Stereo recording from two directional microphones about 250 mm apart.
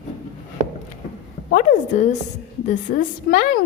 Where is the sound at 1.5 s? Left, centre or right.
Left.